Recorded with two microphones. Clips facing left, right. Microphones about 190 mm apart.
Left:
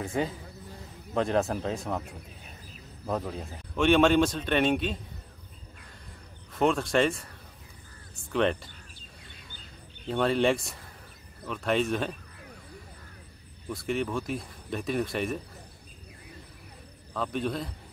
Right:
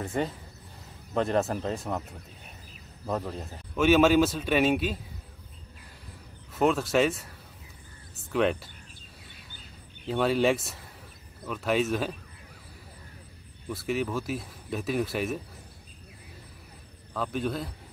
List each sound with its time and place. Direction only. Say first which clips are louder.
0.0 s speech: even; centre (ahead or behind)
3.1 s speech: even; centre (ahead or behind)
6.5 s speech: right 1 dB; centre (ahead or behind)
10.0 s speech: even; 5° right (ahead or behind)
13.7 s speech: even; centre (ahead or behind)
17.1 s speech: even; centre (ahead or behind)